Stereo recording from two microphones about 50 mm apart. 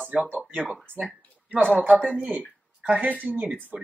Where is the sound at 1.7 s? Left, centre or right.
Right.